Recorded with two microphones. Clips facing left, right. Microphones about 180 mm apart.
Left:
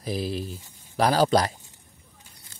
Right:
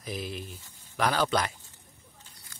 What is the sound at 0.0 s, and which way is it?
Speech, 35° left (ahead or behind).